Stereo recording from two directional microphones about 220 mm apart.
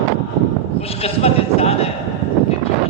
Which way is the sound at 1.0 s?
25° left (ahead or behind).